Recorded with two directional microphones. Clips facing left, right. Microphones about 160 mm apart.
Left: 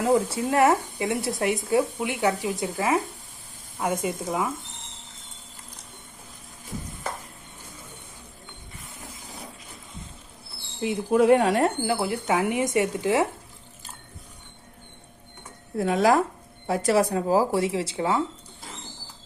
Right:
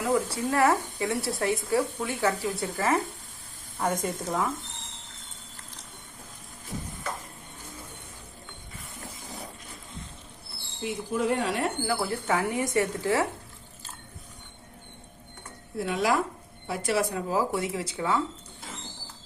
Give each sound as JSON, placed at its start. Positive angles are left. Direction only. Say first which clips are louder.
{"t": 0.0, "sound": "speech", "louder": "left 4 dB", "side_deg": 25}
{"t": 11.1, "sound": "a woman's voice", "louder": "left 9 dB", "side_deg": 60}
{"t": 11.8, "sound": "speech", "louder": "left 3 dB", "side_deg": 20}
{"t": 15.8, "sound": "speech", "louder": "left 5 dB", "side_deg": 40}